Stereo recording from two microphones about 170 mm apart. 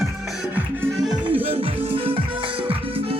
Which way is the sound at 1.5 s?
35° right (ahead or behind).